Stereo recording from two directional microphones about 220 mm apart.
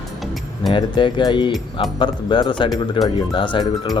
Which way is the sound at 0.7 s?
20° left (ahead or behind).